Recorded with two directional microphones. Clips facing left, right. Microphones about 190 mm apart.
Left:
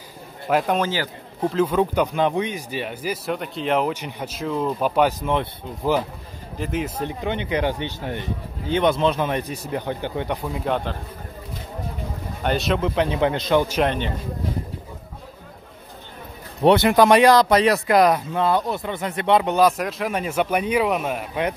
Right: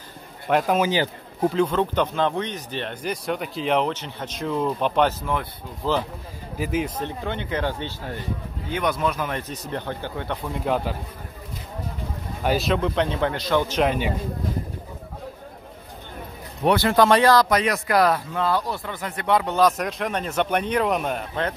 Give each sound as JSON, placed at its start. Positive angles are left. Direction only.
{"t": 0.5, "sound": "speech", "side_deg": 0}
{"t": 0.8, "sound": "a man's voice", "side_deg": -20}
{"t": 1.4, "sound": "speech", "side_deg": 0}
{"t": 5.2, "sound": "speech", "side_deg": 20}
{"t": 6.6, "sound": "speech", "side_deg": 0}
{"t": 7.0, "sound": "speech", "side_deg": 15}
{"t": 9.4, "sound": "speech", "side_deg": 10}
{"t": 10.5, "sound": "speech", "side_deg": 0}
{"t": 12.4, "sound": "speech", "side_deg": 0}
{"t": 13.2, "sound": "speech", "side_deg": 20}
{"t": 13.8, "sound": "a man's voice", "side_deg": -10}
{"t": 16.6, "sound": "speech", "side_deg": 20}
{"t": 19.6, "sound": "speech", "side_deg": 5}